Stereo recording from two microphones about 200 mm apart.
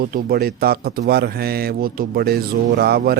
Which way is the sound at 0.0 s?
50° right (ahead or behind).